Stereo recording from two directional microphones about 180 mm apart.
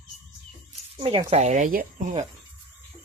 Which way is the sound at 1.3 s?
40° right (ahead or behind).